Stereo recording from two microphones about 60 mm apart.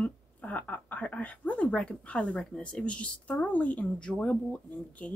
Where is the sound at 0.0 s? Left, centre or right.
Left.